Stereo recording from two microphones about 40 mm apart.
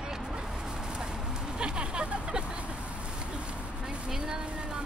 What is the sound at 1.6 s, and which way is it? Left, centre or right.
Vehicle, right.